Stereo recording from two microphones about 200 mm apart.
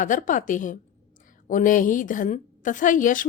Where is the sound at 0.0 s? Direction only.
40° left (ahead or behind).